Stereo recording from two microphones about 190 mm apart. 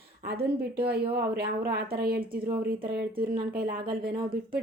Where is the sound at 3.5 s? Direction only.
50° right (ahead or behind).